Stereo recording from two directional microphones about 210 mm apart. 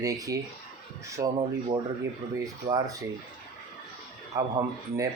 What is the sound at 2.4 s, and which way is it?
Speech, 15° right (ahead or behind).